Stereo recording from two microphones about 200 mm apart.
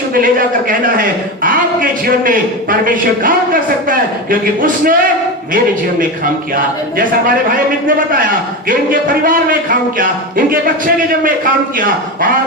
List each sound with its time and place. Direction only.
0.1 s a man's voice: 45° right (ahead or behind)
8.7 s a man's voice: 45° right (ahead or behind)